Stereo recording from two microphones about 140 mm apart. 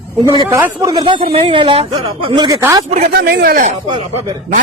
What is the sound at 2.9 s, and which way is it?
Speech, 75° right (ahead or behind).